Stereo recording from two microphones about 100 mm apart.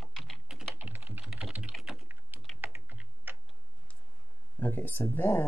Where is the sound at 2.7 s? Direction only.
20° right (ahead or behind).